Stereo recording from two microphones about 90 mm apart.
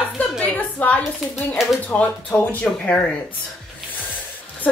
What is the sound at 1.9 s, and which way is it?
Speech, 20° left (ahead or behind).